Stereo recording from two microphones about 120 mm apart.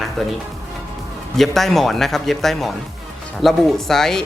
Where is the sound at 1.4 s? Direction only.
Centre (ahead or behind).